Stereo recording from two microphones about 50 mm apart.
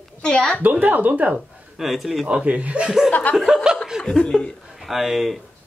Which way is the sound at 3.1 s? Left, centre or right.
Left.